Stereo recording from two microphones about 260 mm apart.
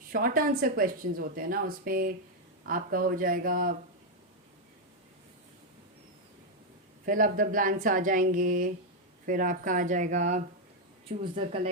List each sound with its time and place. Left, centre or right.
0.1 s speech: right
7.0 s speech: right